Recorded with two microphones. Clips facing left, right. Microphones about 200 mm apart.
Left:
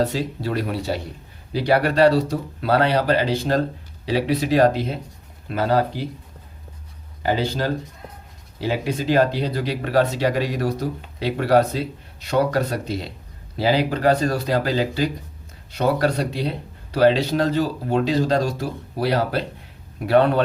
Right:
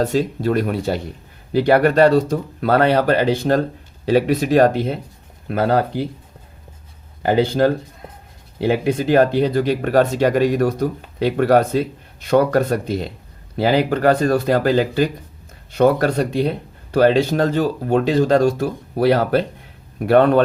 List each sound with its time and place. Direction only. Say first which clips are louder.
0.0 s speech: right 4 dB; 50° right (ahead or behind)
7.2 s speech: right 7 dB; 55° right (ahead or behind)